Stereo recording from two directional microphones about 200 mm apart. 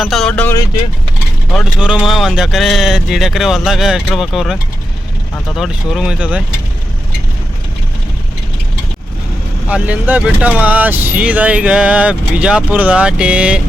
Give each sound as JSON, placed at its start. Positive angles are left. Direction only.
{"t": 0.0, "sound": "speech", "side_deg": 0}
{"t": 1.5, "sound": "speech", "side_deg": -5}
{"t": 5.5, "sound": "speech", "side_deg": 0}
{"t": 9.6, "sound": "speech", "side_deg": -5}